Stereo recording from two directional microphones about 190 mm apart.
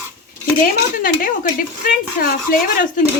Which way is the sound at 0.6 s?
45° left (ahead or behind).